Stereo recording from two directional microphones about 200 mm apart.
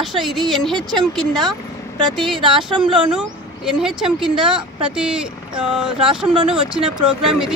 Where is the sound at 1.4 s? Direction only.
20° right (ahead or behind).